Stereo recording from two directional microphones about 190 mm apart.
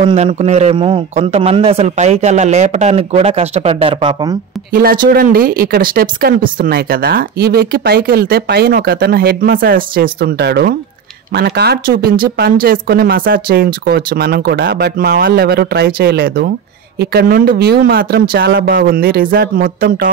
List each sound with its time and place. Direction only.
0.0 s a man's voice: 30° right (ahead or behind)
4.7 s speech: 50° right (ahead or behind)